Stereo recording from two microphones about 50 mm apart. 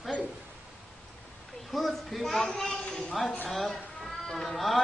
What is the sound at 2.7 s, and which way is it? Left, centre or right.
Speech, centre.